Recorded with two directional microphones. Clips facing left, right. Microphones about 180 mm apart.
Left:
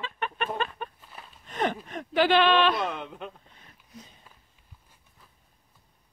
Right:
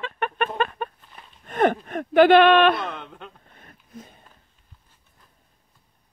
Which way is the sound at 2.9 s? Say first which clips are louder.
Left 2 dB; 5° left (ahead or behind).